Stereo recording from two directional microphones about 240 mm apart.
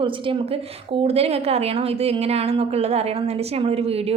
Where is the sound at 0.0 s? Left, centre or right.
Right.